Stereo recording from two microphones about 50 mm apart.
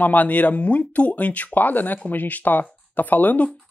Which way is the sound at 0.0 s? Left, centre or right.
Left.